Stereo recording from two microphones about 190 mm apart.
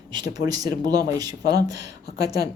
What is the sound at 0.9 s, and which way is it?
Speech, 20° right (ahead or behind).